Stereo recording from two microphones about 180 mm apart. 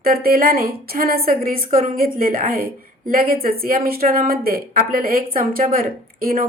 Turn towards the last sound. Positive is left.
turn(degrees=-55)  # may be behind; listen again after turning